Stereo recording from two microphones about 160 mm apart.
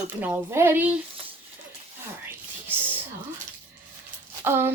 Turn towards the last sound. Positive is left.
turn(degrees=-15)  # may be behind; listen again after turning